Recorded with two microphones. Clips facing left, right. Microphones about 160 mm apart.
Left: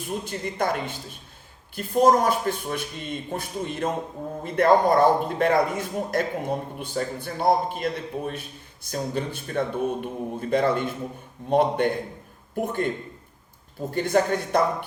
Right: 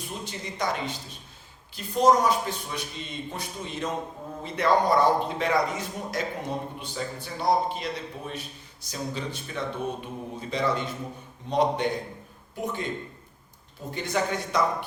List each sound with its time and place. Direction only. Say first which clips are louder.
0.3 s speech: left 3 dB; 55° left (ahead or behind)
13.9 s speech: left 6 dB; 50° left (ahead or behind)